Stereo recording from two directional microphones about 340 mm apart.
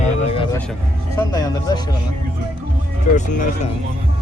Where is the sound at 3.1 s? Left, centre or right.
Left.